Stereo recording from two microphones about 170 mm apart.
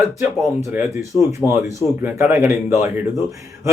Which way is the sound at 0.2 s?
15° right (ahead or behind).